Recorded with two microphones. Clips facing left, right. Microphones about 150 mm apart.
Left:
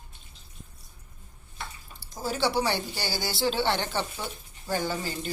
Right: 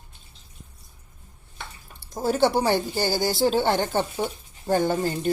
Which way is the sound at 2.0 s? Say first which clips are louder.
Right 7 dB; 55° right (ahead or behind).